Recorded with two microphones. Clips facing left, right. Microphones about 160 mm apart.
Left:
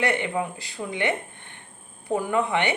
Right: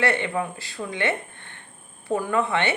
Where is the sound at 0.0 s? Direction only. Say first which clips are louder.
Right 1 dB; 15° left (ahead or behind).